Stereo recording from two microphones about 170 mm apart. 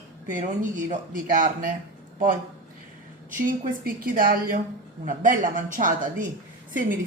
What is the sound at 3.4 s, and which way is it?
A woman's voice, 55° right (ahead or behind).